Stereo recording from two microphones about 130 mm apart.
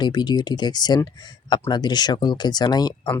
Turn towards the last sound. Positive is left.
turn(degrees=30)  # may be behind; listen again after turning